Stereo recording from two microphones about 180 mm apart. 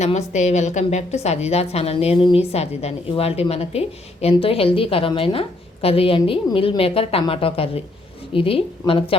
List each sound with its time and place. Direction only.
0.0 s a woman's voice: 40° left (ahead or behind)